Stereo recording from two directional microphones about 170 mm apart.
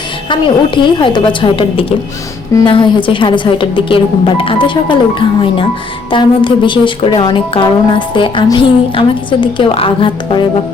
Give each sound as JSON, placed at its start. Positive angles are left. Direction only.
{"t": 0.3, "sound": "a woman's voice", "side_deg": 30}
{"t": 6.1, "sound": "a woman's voice", "side_deg": 30}